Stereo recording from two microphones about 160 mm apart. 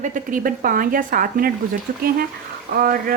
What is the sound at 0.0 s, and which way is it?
Speech, 55° right (ahead or behind).